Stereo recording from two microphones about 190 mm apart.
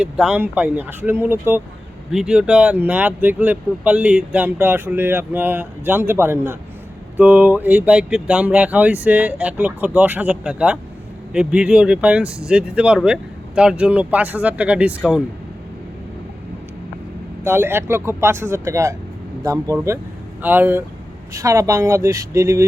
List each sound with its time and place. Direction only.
0.0 s speech: 5° right (ahead or behind)
17.4 s speech: 10° right (ahead or behind)